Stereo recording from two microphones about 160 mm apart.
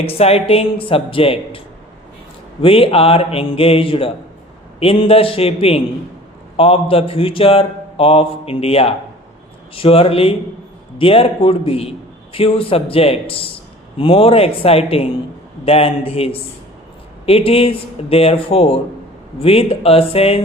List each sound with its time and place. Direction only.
0.0 s a man's voice: 40° left (ahead or behind)